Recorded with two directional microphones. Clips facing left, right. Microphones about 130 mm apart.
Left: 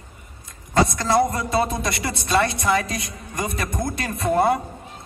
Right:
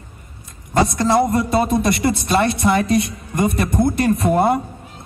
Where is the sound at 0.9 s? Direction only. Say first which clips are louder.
Right 4 dB; 25° right (ahead or behind).